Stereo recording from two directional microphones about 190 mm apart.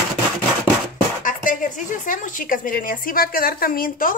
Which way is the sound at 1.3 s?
45° left (ahead or behind).